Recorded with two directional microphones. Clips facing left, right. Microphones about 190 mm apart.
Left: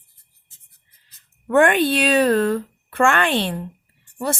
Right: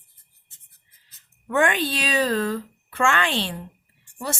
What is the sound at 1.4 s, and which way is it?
A woman's voice, 55° left (ahead or behind).